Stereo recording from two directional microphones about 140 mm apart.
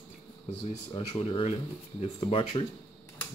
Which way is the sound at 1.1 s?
40° left (ahead or behind).